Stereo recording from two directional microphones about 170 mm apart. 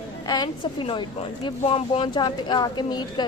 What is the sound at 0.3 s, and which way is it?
Speech, 25° left (ahead or behind).